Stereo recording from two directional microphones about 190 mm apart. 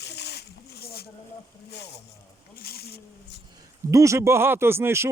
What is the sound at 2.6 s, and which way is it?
Speech, 55° left (ahead or behind).